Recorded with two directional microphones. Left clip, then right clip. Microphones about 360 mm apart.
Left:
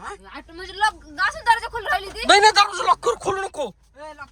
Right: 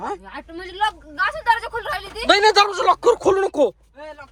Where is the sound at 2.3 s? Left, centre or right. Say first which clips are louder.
Even; centre.